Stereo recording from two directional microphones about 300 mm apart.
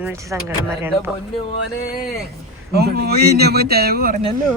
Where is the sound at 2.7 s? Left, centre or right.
Right.